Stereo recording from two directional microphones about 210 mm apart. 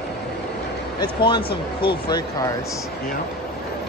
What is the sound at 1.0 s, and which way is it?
Speech, 20° left (ahead or behind).